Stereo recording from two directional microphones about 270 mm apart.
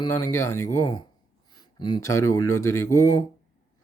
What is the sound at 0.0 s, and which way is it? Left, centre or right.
Speech, centre.